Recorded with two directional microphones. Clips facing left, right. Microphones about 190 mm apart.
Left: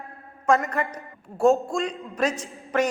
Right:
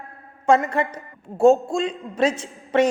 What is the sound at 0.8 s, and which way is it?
A woman's voice, 25° right (ahead or behind).